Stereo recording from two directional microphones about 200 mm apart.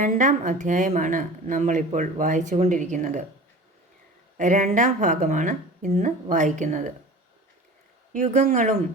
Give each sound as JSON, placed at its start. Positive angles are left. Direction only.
{"t": 0.0, "sound": "speech", "side_deg": -40}
{"t": 4.4, "sound": "speech", "side_deg": -35}
{"t": 8.1, "sound": "speech", "side_deg": -35}